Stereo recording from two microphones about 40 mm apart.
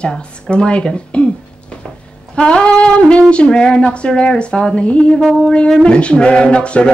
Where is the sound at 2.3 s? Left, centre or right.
Left.